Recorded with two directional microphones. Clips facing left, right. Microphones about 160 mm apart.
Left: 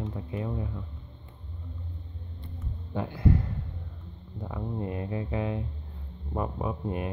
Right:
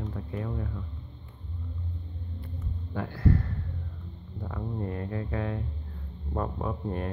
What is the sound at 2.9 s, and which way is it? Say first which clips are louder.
Speech: left 1 dB; 20° left (ahead or behind).